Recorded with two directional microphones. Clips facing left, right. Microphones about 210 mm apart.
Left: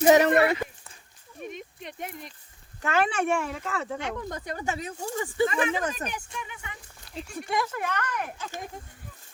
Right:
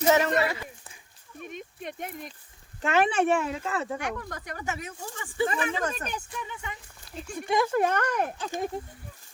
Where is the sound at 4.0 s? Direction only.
25° left (ahead or behind).